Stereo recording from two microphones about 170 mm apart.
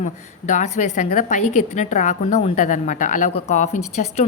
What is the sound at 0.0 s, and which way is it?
A woman's voice, 45° left (ahead or behind).